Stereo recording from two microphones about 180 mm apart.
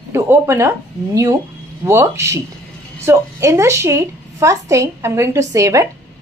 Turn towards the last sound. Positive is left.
turn(degrees=-20)  # may be behind; listen again after turning